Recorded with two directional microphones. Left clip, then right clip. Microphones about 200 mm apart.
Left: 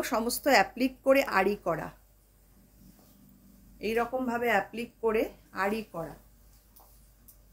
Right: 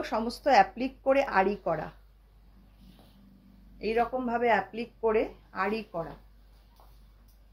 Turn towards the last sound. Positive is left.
turn(degrees=25)  # may be behind; listen again after turning